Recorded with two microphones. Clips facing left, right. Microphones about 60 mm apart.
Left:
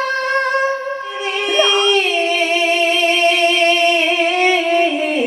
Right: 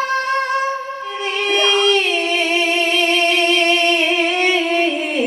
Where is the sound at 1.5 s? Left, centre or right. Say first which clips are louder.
Left 1 dB; centre.